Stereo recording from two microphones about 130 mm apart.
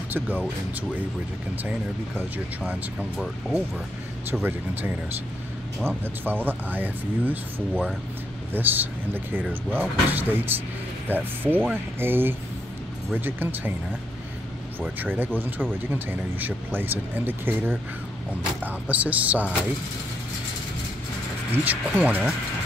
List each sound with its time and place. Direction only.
0.1 s speech: 15° right (ahead or behind)
1.6 s speech: 15° right (ahead or behind)
14.8 s speech: 15° right (ahead or behind)
21.5 s speech: 15° right (ahead or behind)